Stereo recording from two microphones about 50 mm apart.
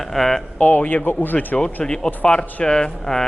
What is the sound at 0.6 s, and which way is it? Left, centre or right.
Speech, left.